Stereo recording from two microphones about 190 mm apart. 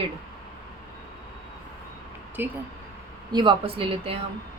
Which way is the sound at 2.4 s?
10° right (ahead or behind).